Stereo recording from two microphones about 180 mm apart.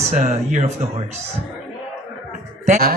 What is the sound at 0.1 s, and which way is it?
Speech, 40° right (ahead or behind).